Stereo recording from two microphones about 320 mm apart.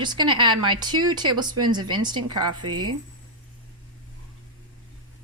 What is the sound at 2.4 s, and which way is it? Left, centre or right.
Speech, right.